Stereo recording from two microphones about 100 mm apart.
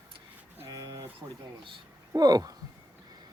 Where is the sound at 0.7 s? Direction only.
40° right (ahead or behind).